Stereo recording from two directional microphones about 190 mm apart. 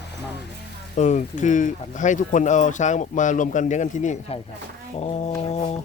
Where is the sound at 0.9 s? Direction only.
40° left (ahead or behind).